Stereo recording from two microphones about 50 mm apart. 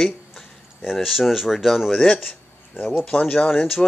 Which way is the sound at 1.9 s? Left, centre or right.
Centre.